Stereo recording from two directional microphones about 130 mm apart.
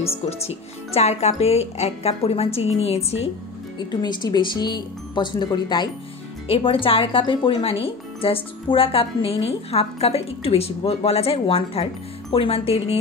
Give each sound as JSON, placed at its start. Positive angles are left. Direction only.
{"t": 0.0, "sound": "speech", "side_deg": 50}
{"t": 3.7, "sound": "speech", "side_deg": 35}
{"t": 6.4, "sound": "speech", "side_deg": 45}